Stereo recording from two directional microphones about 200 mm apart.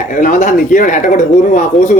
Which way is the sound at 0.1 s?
40° left (ahead or behind).